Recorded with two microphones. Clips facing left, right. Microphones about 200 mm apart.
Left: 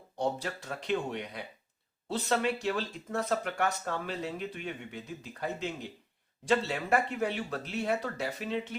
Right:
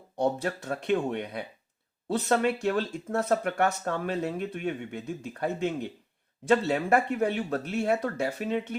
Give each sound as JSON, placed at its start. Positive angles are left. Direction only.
{"t": 0.4, "sound": "speech", "side_deg": -50}